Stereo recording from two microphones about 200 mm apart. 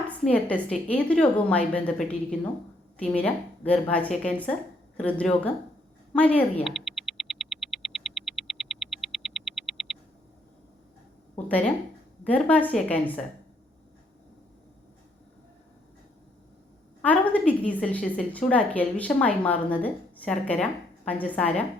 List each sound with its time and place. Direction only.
0.1 s a woman's voice: 5° left (ahead or behind)
6.1 s a sound: 5° left (ahead or behind)
11.4 s a woman's voice: 5° left (ahead or behind)
17.0 s a woman's voice: 5° left (ahead or behind)